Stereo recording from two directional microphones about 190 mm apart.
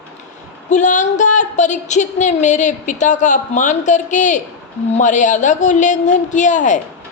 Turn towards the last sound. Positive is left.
turn(degrees=40)  # may be behind; listen again after turning